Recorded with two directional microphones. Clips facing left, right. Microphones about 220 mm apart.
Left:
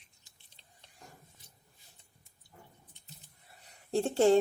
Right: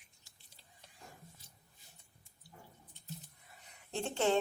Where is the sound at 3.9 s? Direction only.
35° left (ahead or behind).